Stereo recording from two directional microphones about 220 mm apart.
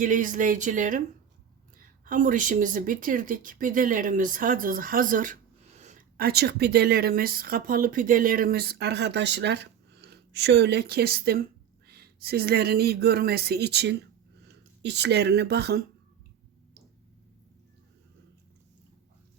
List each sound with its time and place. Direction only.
0.0 s speech: 35° right (ahead or behind)
2.0 s speech: 35° right (ahead or behind)